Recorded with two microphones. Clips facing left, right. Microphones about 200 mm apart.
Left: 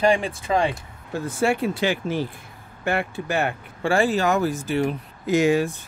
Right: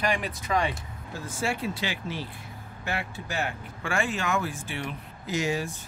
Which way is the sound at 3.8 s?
35° left (ahead or behind).